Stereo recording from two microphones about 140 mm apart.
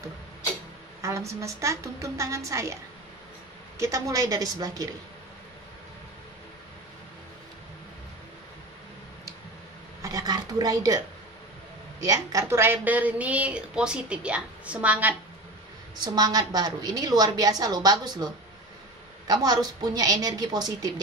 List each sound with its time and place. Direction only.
1.0 s a woman's voice: 20° right (ahead or behind)
10.0 s a sound: 25° right (ahead or behind)
12.0 s a woman's voice: 25° right (ahead or behind)
16.0 s a woman's voice: 30° right (ahead or behind)